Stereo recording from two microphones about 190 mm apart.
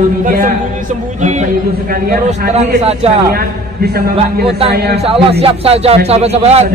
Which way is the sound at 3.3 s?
55° right (ahead or behind).